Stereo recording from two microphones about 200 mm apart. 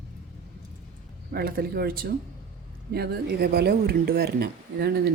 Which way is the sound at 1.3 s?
50° right (ahead or behind).